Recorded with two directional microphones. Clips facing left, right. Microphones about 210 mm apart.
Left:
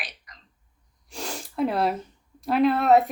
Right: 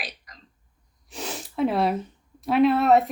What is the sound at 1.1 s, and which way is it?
A woman's voice, centre (ahead or behind).